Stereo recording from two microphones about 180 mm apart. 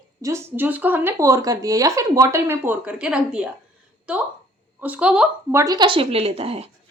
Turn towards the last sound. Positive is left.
turn(degrees=-35)  # may be behind; listen again after turning